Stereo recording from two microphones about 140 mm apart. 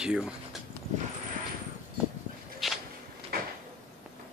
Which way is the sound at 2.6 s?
Centre (ahead or behind).